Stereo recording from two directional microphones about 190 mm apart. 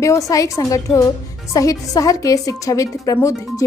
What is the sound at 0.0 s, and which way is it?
A woman's voice, 15° left (ahead or behind).